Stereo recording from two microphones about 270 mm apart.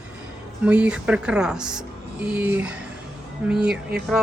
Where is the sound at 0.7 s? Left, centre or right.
Centre.